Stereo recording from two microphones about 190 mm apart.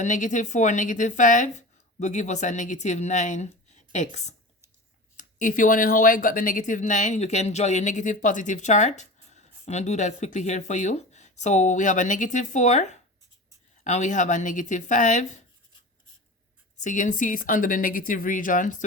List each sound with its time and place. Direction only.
0.0 s speech: 40° left (ahead or behind)
16.7 s a woman's voice: 40° left (ahead or behind)